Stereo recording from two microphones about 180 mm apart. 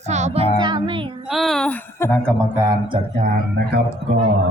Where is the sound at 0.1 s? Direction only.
40° right (ahead or behind).